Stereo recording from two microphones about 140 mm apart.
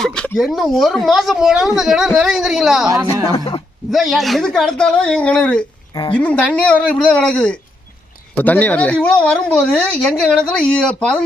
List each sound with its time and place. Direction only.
0.0 s speech: 5° left (ahead or behind)
3.3 s speech: 35° left (ahead or behind)
3.9 s speech: centre (ahead or behind)